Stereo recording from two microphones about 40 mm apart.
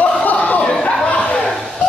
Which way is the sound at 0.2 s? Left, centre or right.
Left.